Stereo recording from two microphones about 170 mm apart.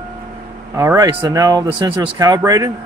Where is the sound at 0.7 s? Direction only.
20° right (ahead or behind).